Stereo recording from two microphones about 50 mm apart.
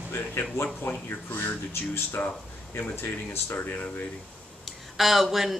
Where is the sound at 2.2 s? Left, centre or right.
Left.